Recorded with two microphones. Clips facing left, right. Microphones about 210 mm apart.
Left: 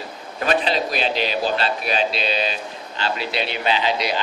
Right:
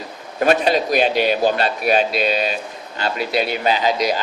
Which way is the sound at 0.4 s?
45° right (ahead or behind).